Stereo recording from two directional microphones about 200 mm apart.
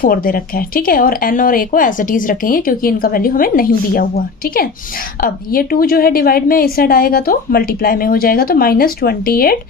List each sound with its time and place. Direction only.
0.0 s speech: 45° left (ahead or behind)